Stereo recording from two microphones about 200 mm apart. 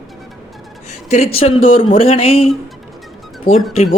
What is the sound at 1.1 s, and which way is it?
Speech, 30° left (ahead or behind).